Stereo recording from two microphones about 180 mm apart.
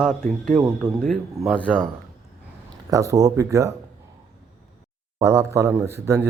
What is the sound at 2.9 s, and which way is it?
Speech, 15° right (ahead or behind).